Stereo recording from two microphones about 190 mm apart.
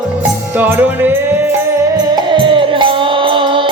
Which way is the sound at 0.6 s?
10° right (ahead or behind).